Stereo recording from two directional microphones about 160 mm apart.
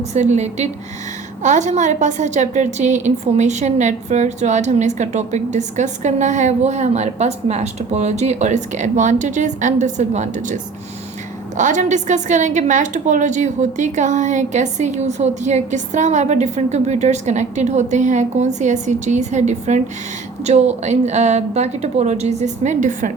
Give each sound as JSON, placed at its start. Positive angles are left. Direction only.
{"t": 0.1, "sound": "a woman's voice", "side_deg": -45}